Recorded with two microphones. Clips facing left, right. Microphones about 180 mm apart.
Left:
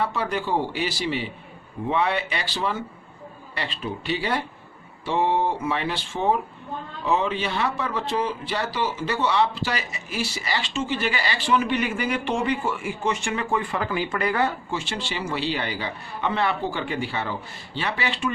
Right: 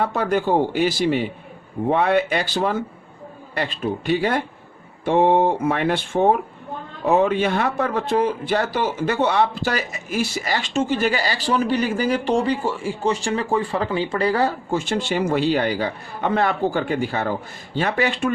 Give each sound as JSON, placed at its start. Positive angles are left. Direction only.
{"t": 0.0, "sound": "speech", "side_deg": -50}